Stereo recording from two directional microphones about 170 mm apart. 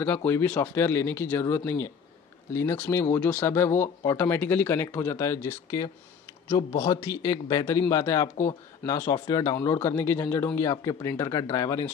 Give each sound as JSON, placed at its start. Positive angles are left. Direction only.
{"t": 0.0, "sound": "speech", "side_deg": 10}